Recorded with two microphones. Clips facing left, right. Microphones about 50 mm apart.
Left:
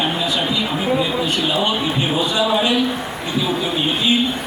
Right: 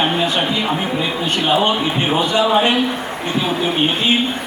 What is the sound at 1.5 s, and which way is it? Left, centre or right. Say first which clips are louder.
A man's voice: right 3 dB; right.